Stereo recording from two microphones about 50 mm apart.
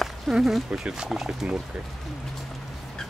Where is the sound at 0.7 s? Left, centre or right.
Centre.